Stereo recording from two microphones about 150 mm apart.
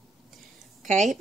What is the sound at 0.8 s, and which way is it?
Speech, 55° right (ahead or behind).